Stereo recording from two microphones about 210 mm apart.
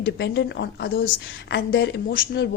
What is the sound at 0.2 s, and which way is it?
A woman's voice, 55° left (ahead or behind).